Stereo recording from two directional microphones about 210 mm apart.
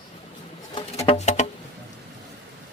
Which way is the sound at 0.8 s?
30° left (ahead or behind).